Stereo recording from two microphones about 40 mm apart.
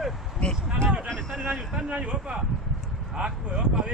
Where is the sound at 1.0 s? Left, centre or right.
Centre.